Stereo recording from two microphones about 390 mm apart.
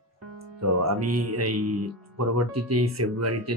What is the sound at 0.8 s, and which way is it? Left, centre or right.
Speech, right.